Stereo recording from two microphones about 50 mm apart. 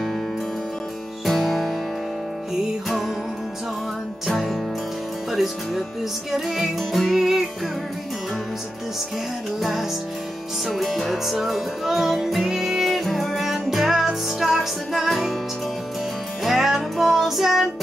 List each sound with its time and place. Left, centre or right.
1.2 s music: centre
4.3 s music: centre
5.3 s speech: centre
6.3 s music: centre
9.6 s music: centre
16.4 s music: centre